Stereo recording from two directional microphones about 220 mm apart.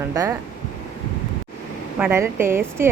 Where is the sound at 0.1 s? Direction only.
15° right (ahead or behind).